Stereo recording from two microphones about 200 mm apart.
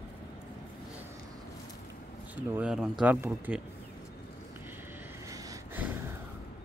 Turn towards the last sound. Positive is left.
turn(degrees=-15)  # may be behind; listen again after turning